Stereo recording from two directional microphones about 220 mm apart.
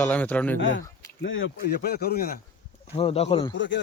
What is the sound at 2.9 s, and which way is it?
Speech, 25° left (ahead or behind).